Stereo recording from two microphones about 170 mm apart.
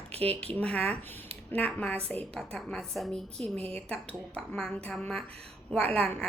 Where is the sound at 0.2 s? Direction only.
35° right (ahead or behind).